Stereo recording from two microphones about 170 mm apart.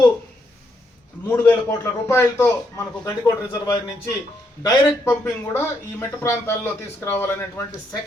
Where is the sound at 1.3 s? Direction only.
10° left (ahead or behind).